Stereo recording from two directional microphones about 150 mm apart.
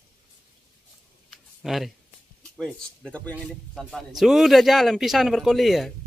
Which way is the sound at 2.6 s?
5° left (ahead or behind).